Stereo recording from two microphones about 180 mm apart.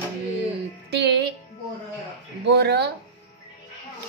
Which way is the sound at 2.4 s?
70° right (ahead or behind).